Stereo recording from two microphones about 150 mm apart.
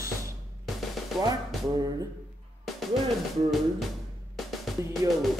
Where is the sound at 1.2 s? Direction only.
25° right (ahead or behind).